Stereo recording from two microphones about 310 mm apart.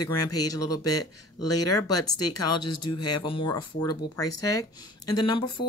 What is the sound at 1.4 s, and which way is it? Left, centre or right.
Speech, left.